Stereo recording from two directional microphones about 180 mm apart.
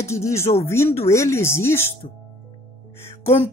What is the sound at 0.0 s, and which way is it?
Speech, 15° left (ahead or behind).